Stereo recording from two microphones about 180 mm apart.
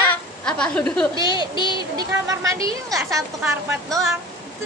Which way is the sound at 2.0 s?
20° right (ahead or behind).